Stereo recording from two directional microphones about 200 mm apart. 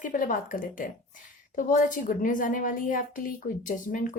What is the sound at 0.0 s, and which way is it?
A woman's voice, 40° left (ahead or behind).